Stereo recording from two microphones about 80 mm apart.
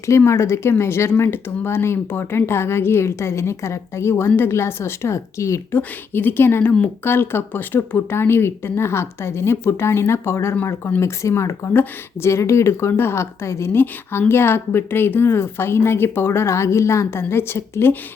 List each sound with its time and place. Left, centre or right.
0.0 s a woman's voice: left
5.7 s a woman's voice: left